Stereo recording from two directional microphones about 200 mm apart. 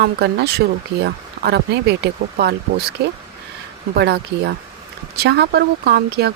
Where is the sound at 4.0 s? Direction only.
55° right (ahead or behind).